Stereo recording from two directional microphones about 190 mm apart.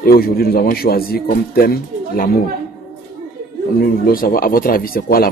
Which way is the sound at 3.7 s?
50° left (ahead or behind).